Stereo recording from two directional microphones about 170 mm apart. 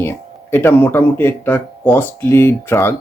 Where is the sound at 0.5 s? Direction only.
10° left (ahead or behind).